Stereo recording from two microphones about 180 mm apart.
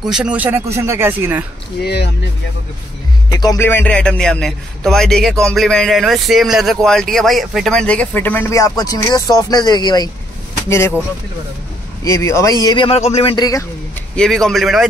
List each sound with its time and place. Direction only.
0.0 s speech: 5° right (ahead or behind)
1.8 s speech: 65° left (ahead or behind)
3.3 s speech: 20° left (ahead or behind)
12.0 s a man's voice: 15° left (ahead or behind)
14.1 s speech: 5° left (ahead or behind)